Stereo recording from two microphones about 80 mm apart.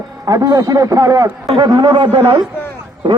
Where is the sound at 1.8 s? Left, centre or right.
Right.